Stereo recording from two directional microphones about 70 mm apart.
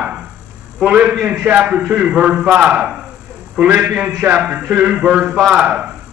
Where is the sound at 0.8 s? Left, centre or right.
Centre.